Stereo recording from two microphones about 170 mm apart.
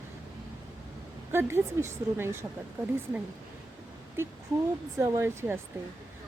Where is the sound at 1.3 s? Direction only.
15° right (ahead or behind).